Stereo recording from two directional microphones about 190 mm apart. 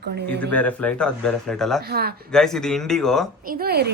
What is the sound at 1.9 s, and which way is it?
Speech, 55° right (ahead or behind).